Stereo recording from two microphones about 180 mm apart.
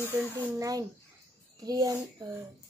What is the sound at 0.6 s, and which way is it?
Speech, 20° right (ahead or behind).